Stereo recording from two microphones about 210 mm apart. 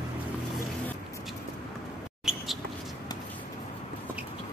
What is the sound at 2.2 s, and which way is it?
Mouse, centre (ahead or behind).